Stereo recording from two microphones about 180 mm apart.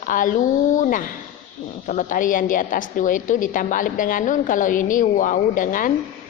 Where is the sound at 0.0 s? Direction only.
50° left (ahead or behind).